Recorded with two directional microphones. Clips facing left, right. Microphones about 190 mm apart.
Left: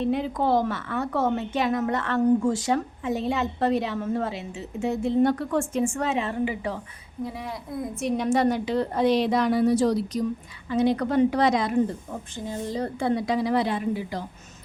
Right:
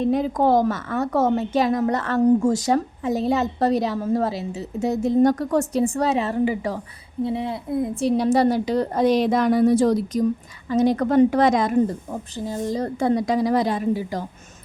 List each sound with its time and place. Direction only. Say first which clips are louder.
0.0 s a woman's voice: right 5 dB; 40° right (ahead or behind)
7.3 s a woman's voice: right 11 dB; 25° right (ahead or behind); by 14.3 s 40° right (ahead or behind)